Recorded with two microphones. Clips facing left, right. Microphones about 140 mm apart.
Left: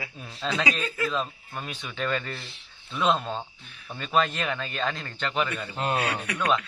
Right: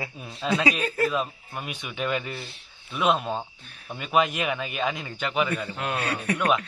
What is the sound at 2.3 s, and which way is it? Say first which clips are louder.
A man's voice: right 2 dB; centre (ahead or behind).